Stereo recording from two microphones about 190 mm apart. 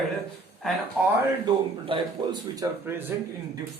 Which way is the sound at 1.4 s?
25° right (ahead or behind).